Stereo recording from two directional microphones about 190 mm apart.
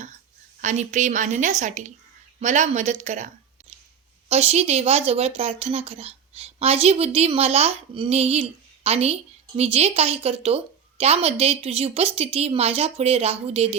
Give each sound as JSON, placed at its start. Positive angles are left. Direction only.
{"t": 0.6, "sound": "a woman's voice", "side_deg": -40}
{"t": 4.3, "sound": "a woman's voice", "side_deg": -35}